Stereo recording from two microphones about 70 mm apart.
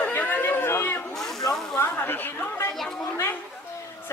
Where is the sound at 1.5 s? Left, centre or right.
Left.